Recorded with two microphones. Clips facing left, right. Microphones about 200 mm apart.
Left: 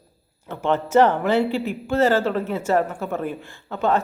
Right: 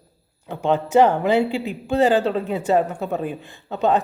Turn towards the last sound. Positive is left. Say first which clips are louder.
# right 2 dB
turn(degrees=-20)  # may be behind; listen again after turning